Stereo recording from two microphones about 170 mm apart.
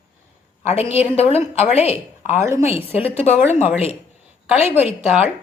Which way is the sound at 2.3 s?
15° right (ahead or behind).